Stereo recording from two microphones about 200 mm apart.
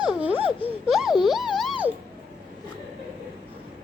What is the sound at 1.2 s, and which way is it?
Police car, centre (ahead or behind).